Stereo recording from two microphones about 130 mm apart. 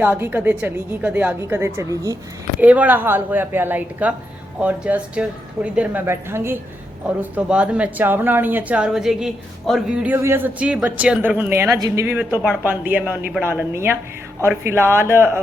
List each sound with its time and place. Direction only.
0.0 s speech: 15° right (ahead or behind)
2.6 s speech: 10° right (ahead or behind)
10.2 s speech: 20° right (ahead or behind)